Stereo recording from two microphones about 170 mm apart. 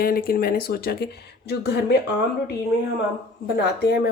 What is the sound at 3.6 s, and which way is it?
Speech, 75° left (ahead or behind).